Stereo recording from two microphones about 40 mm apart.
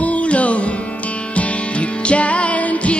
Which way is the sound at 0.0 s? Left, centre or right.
Left.